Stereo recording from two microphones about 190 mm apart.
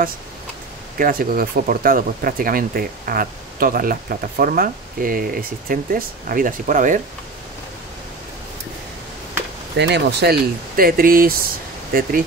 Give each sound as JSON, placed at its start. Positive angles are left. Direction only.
{"t": 0.9, "sound": "speech", "side_deg": -50}
{"t": 9.8, "sound": "speech", "side_deg": -65}